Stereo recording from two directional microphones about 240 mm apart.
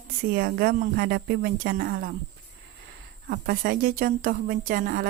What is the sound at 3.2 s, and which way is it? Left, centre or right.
Speech, right.